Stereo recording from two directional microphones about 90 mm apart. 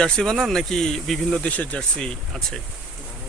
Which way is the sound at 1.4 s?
15° left (ahead or behind).